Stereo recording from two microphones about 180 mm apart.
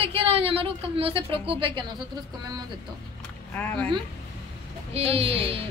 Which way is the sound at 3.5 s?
10° left (ahead or behind).